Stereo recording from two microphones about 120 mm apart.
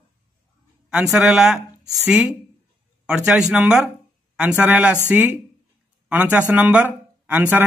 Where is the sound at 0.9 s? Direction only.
5° right (ahead or behind).